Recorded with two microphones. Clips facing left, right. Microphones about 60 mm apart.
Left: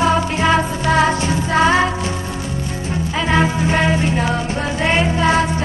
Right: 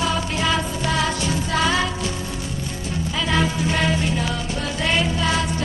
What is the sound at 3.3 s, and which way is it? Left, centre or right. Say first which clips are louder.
Music: left 5 dB; left.